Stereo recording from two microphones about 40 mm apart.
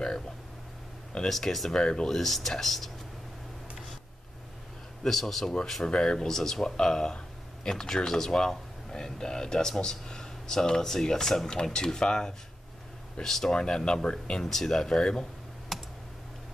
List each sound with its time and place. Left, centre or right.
1.1 s speech: left; by 2.9 s centre
5.0 s speech: centre
5.9 s speech: centre
14.4 s speech: centre
15.7 s computer keyboard: centre